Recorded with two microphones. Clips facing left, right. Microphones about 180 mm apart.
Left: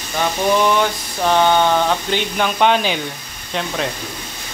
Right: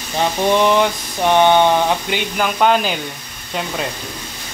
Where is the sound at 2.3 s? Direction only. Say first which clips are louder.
Right 1 dB; 5° right (ahead or behind).